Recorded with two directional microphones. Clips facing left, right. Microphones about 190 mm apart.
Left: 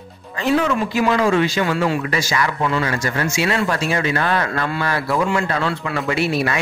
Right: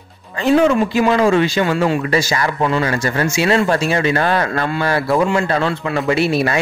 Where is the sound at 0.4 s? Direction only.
30° right (ahead or behind).